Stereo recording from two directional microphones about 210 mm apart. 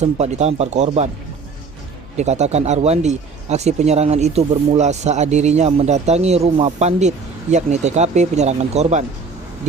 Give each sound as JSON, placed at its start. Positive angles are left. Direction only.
{"t": 0.0, "sound": "speech", "side_deg": -30}
{"t": 2.1, "sound": "speech", "side_deg": -30}